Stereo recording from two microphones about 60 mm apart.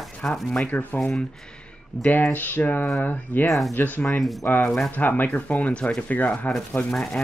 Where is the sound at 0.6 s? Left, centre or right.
Left.